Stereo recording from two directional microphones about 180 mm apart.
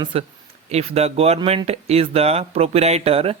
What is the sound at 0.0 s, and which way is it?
Speech, 30° right (ahead or behind).